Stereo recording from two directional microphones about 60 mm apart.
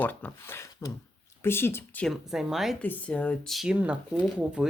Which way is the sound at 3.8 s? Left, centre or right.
Right.